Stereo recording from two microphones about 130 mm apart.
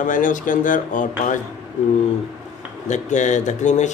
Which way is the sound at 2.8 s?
70° left (ahead or behind).